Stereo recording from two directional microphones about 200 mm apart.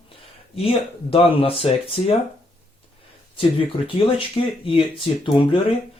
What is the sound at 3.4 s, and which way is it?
Speech, 25° left (ahead or behind).